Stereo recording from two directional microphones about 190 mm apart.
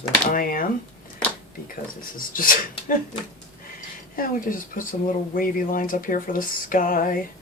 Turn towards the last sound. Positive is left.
turn(degrees=45)  # may be behind; listen again after turning